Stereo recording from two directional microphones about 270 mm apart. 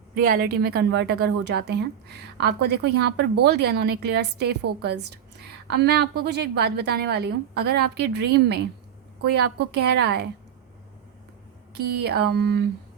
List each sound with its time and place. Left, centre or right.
0.1 s a woman's voice: right
11.7 s a woman's voice: right